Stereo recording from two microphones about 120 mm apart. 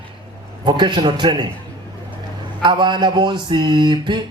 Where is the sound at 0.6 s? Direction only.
35° right (ahead or behind).